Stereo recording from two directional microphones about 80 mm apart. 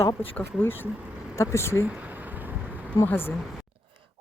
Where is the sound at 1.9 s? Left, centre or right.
Right.